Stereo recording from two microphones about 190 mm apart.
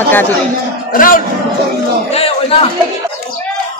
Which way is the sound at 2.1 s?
30° left (ahead or behind).